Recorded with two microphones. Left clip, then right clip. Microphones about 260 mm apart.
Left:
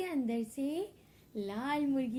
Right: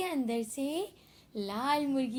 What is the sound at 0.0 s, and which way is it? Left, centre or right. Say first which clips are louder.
A woman's voice: right 3 dB; right.